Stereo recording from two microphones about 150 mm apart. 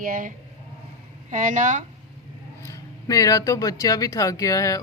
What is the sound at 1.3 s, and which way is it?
Speech, 55° right (ahead or behind).